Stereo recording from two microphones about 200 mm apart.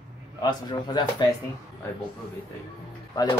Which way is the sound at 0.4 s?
20° left (ahead or behind).